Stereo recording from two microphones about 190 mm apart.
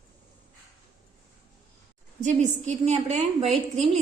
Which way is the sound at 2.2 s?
40° right (ahead or behind).